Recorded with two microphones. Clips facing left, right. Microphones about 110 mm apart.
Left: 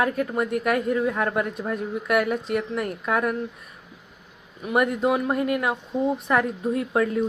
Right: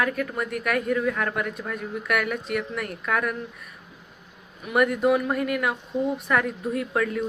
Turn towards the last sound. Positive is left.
turn(degrees=25)  # may be behind; listen again after turning